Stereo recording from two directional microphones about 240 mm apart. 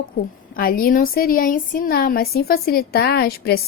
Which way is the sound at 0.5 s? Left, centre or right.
Left.